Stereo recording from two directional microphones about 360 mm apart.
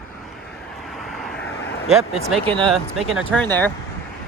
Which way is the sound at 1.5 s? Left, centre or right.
Left.